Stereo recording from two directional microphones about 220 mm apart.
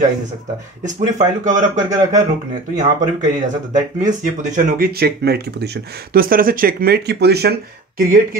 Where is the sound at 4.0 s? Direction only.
35° right (ahead or behind).